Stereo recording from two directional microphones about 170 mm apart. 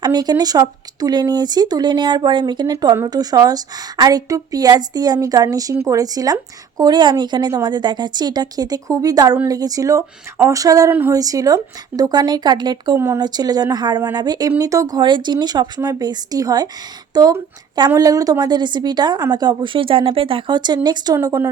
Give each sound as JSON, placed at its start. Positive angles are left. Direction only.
{"t": 0.0, "sound": "a woman's voice", "side_deg": -25}